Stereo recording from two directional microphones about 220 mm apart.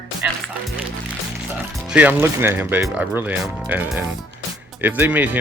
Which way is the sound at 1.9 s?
5° right (ahead or behind).